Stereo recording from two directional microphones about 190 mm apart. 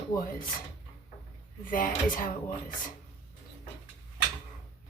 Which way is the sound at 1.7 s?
45° left (ahead or behind).